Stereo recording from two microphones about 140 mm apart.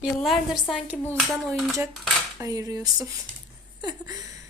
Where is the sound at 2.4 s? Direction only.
25° right (ahead or behind).